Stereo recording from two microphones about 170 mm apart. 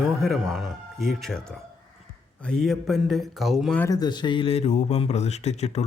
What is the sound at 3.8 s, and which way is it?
Speech, 20° left (ahead or behind).